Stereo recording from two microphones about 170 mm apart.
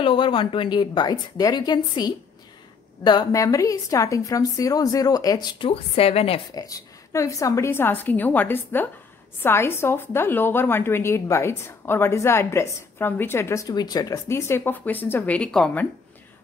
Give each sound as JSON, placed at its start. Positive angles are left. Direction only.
{"t": 0.0, "sound": "a woman's voice", "side_deg": 30}
{"t": 6.5, "sound": "a woman's voice", "side_deg": 20}